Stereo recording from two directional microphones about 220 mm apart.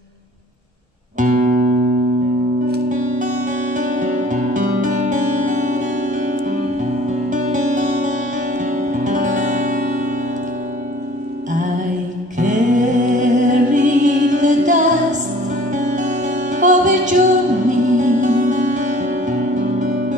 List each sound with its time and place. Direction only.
1.1 s music: 35° right (ahead or behind)
2.7 s music: 35° right (ahead or behind)
7.2 s music: 35° right (ahead or behind)
12.4 s music: 35° right (ahead or behind)